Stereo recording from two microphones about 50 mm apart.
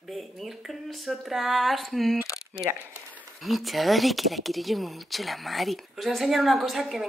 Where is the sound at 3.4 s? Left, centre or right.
Centre.